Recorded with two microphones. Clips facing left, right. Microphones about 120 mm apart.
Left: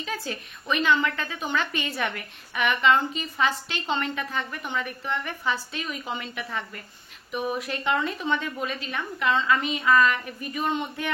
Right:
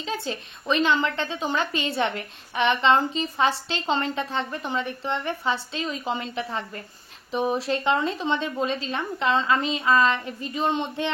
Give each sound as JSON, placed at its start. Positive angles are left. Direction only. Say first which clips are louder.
{"t": 0.0, "sound": "a woman's voice", "louder": "right 3 dB", "side_deg": -25}